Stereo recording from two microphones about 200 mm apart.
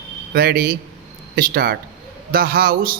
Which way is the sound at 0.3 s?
50° right (ahead or behind).